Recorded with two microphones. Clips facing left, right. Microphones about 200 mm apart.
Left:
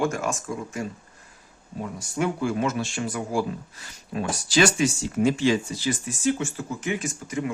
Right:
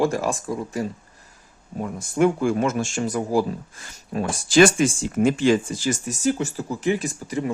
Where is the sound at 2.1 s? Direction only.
50° right (ahead or behind).